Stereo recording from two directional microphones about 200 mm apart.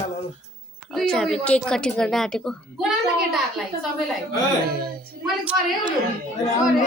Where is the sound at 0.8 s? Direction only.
5° left (ahead or behind).